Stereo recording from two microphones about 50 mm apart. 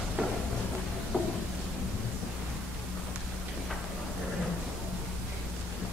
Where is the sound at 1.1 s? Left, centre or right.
Centre.